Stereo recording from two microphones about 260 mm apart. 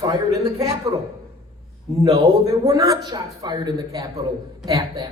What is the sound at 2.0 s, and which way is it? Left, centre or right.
A man's voice, centre.